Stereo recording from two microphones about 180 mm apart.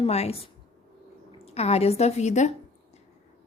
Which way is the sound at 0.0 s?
35° left (ahead or behind).